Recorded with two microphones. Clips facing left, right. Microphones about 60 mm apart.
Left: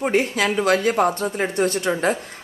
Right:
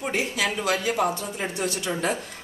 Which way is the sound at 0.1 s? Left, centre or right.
Left.